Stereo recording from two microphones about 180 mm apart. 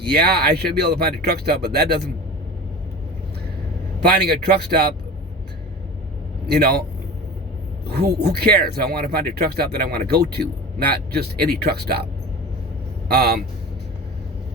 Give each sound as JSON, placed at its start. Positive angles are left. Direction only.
{"t": 0.0, "sound": "speech", "side_deg": -60}
{"t": 4.0, "sound": "speech", "side_deg": -65}
{"t": 6.5, "sound": "speech", "side_deg": -60}
{"t": 7.9, "sound": "speech", "side_deg": -65}
{"t": 13.1, "sound": "speech", "side_deg": -60}